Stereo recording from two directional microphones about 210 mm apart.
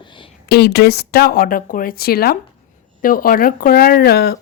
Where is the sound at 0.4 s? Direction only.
50° left (ahead or behind).